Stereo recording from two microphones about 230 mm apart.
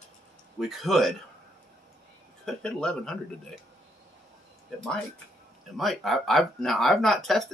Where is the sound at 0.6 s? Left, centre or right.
Centre.